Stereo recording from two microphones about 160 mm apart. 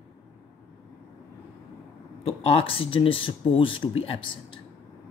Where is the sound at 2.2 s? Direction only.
40° left (ahead or behind).